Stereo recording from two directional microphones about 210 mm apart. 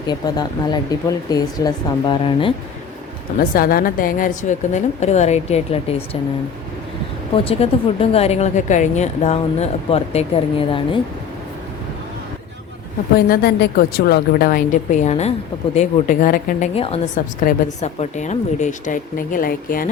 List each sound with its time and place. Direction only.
0.1 s speech: 20° left (ahead or behind)
3.3 s speech: 45° left (ahead or behind)
7.3 s speech: 25° left (ahead or behind)
13.1 s a woman's voice: 45° left (ahead or behind)
16.7 s speech: 30° left (ahead or behind)